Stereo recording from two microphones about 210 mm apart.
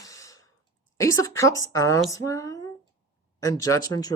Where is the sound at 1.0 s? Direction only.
15° left (ahead or behind).